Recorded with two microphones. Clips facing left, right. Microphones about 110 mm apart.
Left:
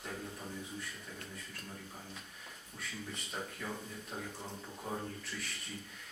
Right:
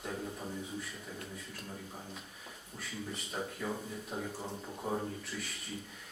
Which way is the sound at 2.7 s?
Centre (ahead or behind).